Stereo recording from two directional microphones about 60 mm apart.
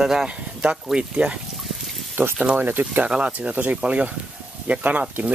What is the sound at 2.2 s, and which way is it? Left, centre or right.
Speech, right.